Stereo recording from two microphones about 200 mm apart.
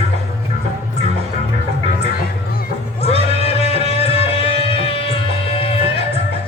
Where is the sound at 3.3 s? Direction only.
30° left (ahead or behind).